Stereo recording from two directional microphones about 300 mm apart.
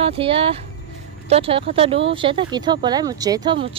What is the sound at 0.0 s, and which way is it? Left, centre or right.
Speech, centre.